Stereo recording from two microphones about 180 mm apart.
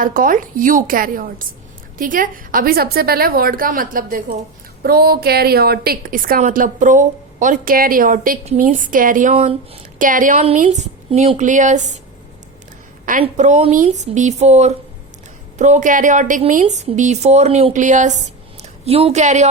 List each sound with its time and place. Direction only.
0.0 s a woman's voice: 50° right (ahead or behind)
9.3 s a woman's voice: 35° right (ahead or behind)
10.0 s a woman's voice: 50° right (ahead or behind)
13.2 s a woman's voice: 40° right (ahead or behind)